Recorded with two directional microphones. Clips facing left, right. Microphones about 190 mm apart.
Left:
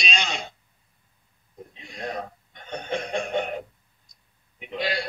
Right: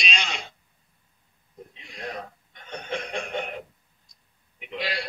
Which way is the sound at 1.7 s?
40° left (ahead or behind).